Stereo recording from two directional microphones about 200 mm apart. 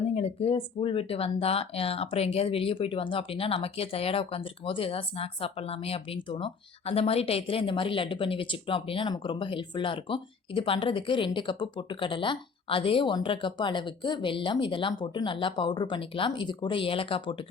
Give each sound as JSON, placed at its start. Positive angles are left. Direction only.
{"t": 0.2, "sound": "speech", "side_deg": 30}